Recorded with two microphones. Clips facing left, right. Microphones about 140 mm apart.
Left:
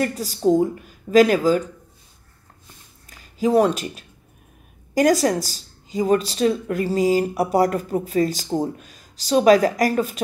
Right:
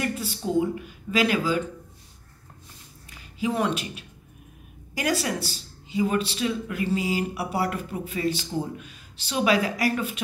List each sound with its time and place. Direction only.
0.0 s a woman's voice: 40° left (ahead or behind)
3.1 s a sound: 40° left (ahead or behind)
4.9 s a woman's voice: 40° left (ahead or behind)